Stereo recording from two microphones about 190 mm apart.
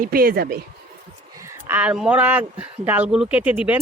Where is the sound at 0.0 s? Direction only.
50° right (ahead or behind).